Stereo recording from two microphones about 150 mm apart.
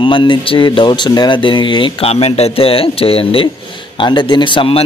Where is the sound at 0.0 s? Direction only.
35° left (ahead or behind).